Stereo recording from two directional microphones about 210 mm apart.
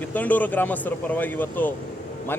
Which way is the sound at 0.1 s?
5° left (ahead or behind).